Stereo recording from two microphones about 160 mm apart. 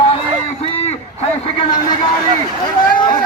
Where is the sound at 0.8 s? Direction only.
40° left (ahead or behind).